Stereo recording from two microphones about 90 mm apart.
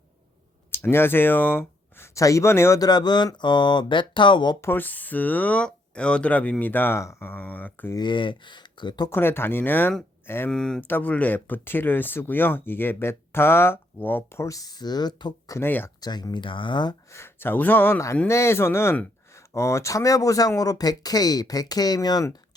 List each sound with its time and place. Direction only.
0.7 s speech: 25° left (ahead or behind)
2.1 s speech: 35° left (ahead or behind)
2.8 s speech: 50° left (ahead or behind)
4.6 s speech: 20° left (ahead or behind)
7.0 s speech: 35° left (ahead or behind)
7.3 s speech: 20° left (ahead or behind)
7.9 s speech: 60° left (ahead or behind)
9.0 s speech: 25° left (ahead or behind)
10.5 s speech: 5° left (ahead or behind)
10.8 s speech: 20° left (ahead or behind)
14.4 s speech: 40° left (ahead or behind)
15.5 s speech: 25° left (ahead or behind)
16.0 s speech: 50° left (ahead or behind)
17.1 s speech: 30° left (ahead or behind); by 22.4 s 50° left (ahead or behind)